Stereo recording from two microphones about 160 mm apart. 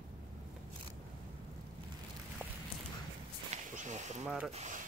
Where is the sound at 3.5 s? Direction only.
50° right (ahead or behind).